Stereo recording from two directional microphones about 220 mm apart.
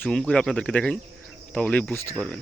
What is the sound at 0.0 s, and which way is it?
Speech, 5° left (ahead or behind).